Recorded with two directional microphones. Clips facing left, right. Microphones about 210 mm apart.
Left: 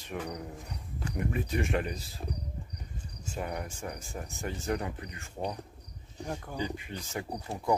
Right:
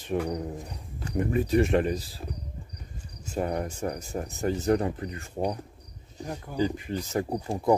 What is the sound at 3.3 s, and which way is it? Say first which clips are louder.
Speech: right 8 dB; 40° right (ahead or behind).